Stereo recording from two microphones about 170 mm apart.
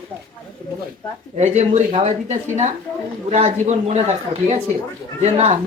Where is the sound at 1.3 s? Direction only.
40° right (ahead or behind).